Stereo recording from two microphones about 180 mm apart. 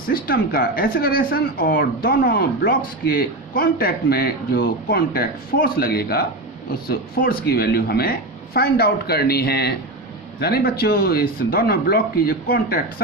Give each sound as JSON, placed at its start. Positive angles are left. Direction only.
{"t": 0.1, "sound": "a man's voice", "side_deg": 55}